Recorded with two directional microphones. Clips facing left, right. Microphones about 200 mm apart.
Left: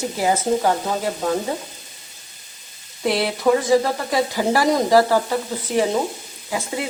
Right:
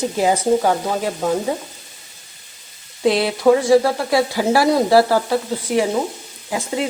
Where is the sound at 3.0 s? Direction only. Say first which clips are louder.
Right 4 dB; 15° right (ahead or behind).